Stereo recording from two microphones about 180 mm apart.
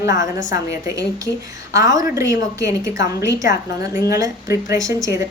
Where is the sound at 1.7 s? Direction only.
20° right (ahead or behind).